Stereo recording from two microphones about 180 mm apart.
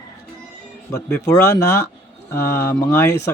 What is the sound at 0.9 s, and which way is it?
A man's voice, 15° left (ahead or behind).